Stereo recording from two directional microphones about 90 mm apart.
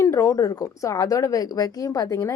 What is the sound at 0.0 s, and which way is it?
A woman's voice, 35° left (ahead or behind).